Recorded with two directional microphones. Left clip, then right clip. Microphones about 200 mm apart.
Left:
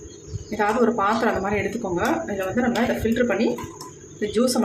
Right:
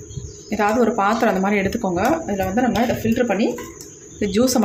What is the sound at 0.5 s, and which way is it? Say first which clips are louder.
Speech: right 3 dB; 35° right (ahead or behind).